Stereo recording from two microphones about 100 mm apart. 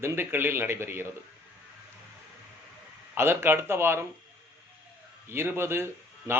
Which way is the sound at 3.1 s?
25° right (ahead or behind).